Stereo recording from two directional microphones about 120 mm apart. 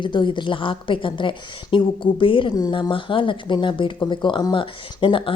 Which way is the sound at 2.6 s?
30° left (ahead or behind).